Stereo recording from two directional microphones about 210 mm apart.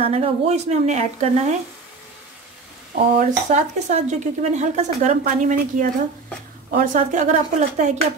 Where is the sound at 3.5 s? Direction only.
35° right (ahead or behind).